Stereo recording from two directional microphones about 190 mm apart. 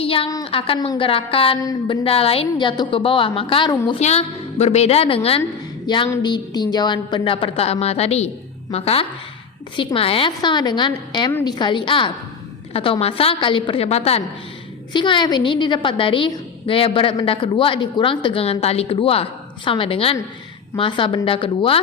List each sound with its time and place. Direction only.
0.0 s a woman's voice: 30° left (ahead or behind)